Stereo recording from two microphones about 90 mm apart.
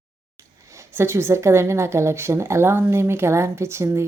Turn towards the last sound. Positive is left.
turn(degrees=-30)  # may be behind; listen again after turning